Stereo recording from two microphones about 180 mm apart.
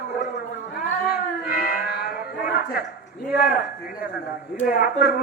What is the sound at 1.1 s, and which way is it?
Music, 55° left (ahead or behind).